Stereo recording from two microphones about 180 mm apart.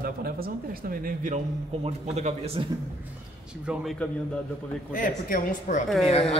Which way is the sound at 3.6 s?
Centre (ahead or behind).